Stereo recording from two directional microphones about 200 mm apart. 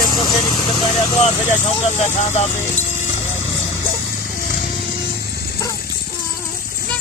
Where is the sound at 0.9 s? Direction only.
35° left (ahead or behind).